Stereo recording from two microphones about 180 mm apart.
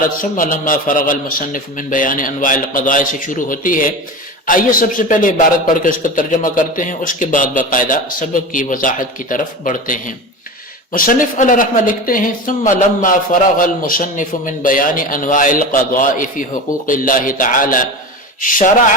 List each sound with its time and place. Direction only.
0.2 s a man's voice: 50° left (ahead or behind)